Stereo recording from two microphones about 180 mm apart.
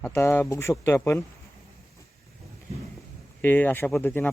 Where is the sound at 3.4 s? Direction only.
10° left (ahead or behind).